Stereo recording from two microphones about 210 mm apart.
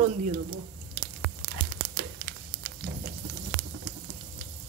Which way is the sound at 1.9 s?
60° right (ahead or behind).